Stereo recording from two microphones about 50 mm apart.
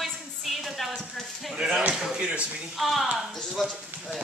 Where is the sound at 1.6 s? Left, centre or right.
Centre.